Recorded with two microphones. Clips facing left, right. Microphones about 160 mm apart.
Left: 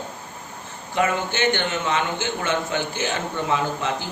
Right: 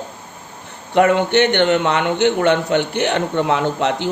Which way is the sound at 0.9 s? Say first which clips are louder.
Right 9 dB; 65° right (ahead or behind).